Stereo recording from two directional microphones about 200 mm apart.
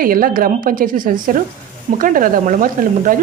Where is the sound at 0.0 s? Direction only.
45° right (ahead or behind).